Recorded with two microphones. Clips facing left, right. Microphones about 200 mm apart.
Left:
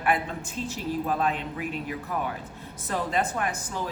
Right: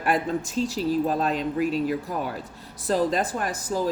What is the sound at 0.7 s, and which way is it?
Speech, 35° right (ahead or behind).